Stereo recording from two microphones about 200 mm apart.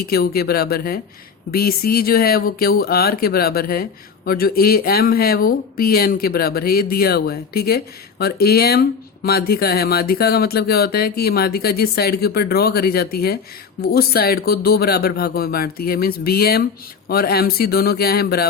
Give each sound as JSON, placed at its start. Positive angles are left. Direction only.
{"t": 0.0, "sound": "speech", "side_deg": 50}